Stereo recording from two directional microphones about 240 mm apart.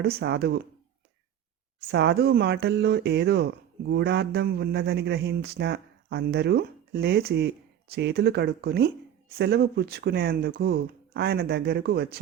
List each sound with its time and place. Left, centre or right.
0.0 s speech: right
1.9 s speech: right